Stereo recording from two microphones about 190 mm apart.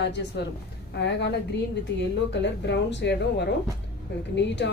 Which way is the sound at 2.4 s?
70° left (ahead or behind).